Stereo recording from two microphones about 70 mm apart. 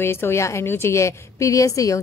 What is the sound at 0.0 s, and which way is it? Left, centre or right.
A woman's voice, left.